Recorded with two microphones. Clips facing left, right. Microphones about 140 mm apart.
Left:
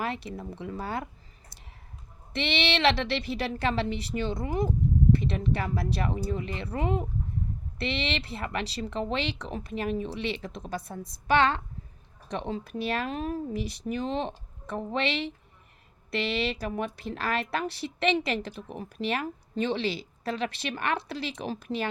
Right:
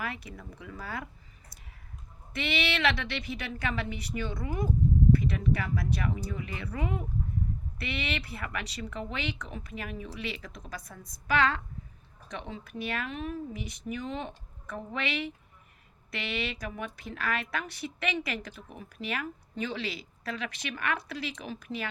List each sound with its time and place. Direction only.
0.0 s speech: 30° left (ahead or behind)
1.5 s a sound: 30° left (ahead or behind)
2.3 s speech: 25° left (ahead or behind)